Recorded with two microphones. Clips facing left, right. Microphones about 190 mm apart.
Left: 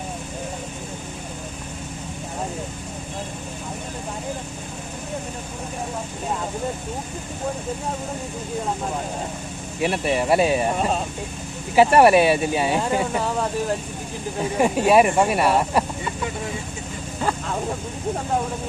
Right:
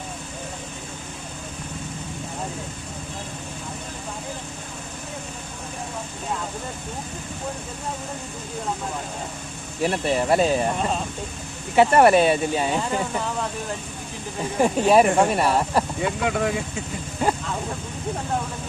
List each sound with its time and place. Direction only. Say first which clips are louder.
9.8 s speech: even; 10° left (ahead or behind)
11.7 s speech: left 1 dB; 10° left (ahead or behind)
14.6 s speech: even; 5° left (ahead or behind)
16.0 s speech: right 5 dB; 90° right